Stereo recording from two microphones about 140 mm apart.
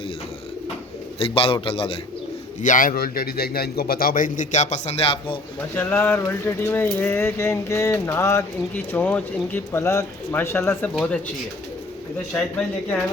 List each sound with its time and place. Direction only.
1.2 s a man's voice: 40° left (ahead or behind)
2.6 s a man's voice: 70° left (ahead or behind); by 5.4 s 40° left (ahead or behind)
5.7 s speech: 15° left (ahead or behind)
7.0 s mantra: 15° left (ahead or behind)
8.9 s speech: 10° left (ahead or behind)
12.3 s speech: 5° left (ahead or behind)